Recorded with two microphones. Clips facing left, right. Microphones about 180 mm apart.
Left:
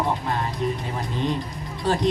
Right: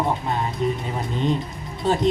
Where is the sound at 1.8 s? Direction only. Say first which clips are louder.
Right 2 dB; 25° right (ahead or behind).